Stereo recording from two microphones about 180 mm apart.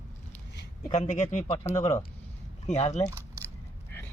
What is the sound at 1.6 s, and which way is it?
Speech, 15° left (ahead or behind).